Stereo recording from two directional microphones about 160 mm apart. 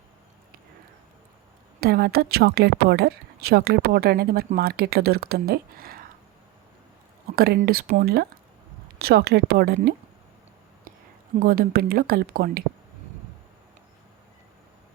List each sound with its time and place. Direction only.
1.8 s speech: 75° right (ahead or behind)
7.3 s speech: 75° right (ahead or behind)
11.3 s speech: 65° right (ahead or behind)